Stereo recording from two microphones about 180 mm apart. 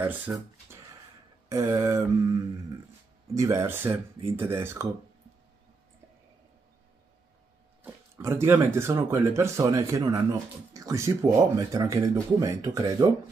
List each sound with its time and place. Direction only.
0.0 s speech: 10° right (ahead or behind)
3.3 s speech: 15° right (ahead or behind)
7.8 s speech: 15° right (ahead or behind)